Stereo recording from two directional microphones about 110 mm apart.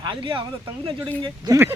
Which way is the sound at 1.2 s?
40° right (ahead or behind).